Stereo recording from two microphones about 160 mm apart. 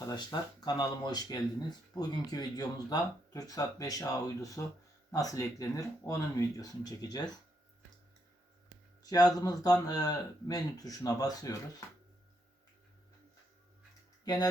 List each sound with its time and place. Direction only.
0.0 s speech: 25° left (ahead or behind)
9.0 s speech: 25° left (ahead or behind)